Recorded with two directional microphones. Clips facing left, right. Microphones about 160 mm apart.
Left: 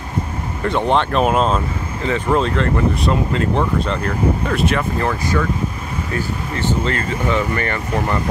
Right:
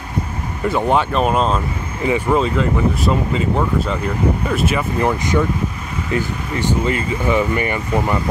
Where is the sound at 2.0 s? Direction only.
10° right (ahead or behind).